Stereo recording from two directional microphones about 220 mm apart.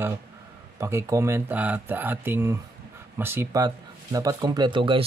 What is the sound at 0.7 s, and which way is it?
Speech, 15° right (ahead or behind).